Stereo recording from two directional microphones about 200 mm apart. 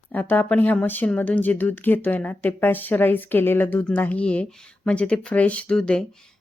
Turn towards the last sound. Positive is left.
turn(degrees=5)  # may be behind; listen again after turning